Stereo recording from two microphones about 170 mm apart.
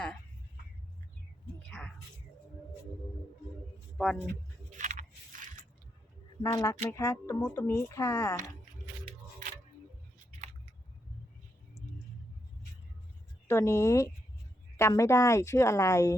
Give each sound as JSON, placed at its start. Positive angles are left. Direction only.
{"t": 3.9, "sound": "speech", "side_deg": 0}
{"t": 4.8, "sound": "a sound", "side_deg": -50}
{"t": 6.4, "sound": "speech", "side_deg": 20}
{"t": 13.5, "sound": "speech", "side_deg": 15}